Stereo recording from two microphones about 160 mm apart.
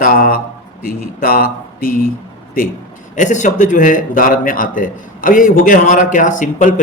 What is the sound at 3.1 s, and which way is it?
A man's voice, 50° left (ahead or behind).